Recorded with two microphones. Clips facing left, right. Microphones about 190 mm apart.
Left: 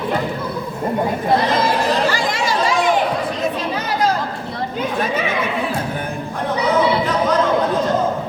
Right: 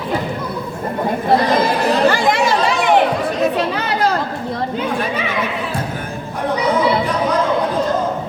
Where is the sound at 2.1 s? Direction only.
60° right (ahead or behind).